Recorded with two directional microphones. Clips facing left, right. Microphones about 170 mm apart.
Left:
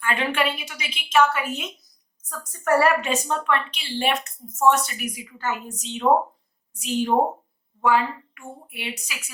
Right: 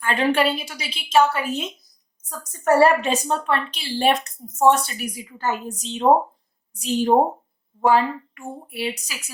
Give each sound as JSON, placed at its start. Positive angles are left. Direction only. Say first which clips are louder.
{"t": 0.0, "sound": "a woman's voice", "louder": "right 4 dB", "side_deg": -35}